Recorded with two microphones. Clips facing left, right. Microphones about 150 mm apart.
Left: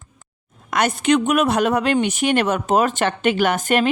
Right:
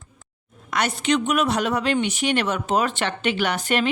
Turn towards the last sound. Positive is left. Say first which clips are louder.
# left 5 dB
turn(degrees=45)  # may be behind; listen again after turning